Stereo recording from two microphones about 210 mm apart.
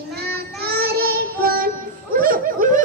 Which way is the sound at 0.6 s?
45° right (ahead or behind).